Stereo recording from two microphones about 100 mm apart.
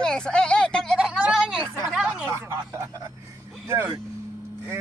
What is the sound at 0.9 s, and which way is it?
Speech, 5° right (ahead or behind).